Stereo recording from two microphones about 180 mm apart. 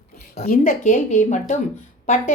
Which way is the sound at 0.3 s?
55° left (ahead or behind).